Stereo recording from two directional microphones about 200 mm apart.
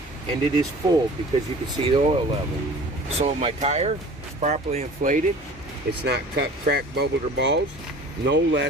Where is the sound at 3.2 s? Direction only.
35° right (ahead or behind).